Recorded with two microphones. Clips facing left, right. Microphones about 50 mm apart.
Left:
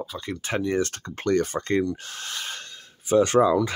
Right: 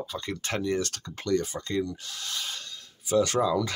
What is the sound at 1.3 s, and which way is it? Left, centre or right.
Speech, left.